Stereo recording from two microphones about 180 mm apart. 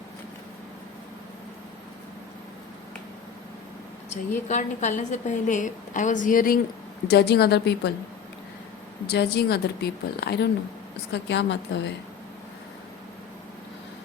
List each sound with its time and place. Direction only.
4.1 s a woman's voice: 40° left (ahead or behind)
7.1 s a woman's voice: 65° left (ahead or behind)
9.0 s a woman's voice: 65° left (ahead or behind)
11.1 s a woman's voice: 75° left (ahead or behind)